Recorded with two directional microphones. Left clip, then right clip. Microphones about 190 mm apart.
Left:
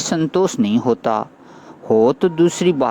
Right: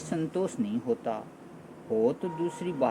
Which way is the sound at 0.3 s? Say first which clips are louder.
Left 14 dB; 45° left (ahead or behind).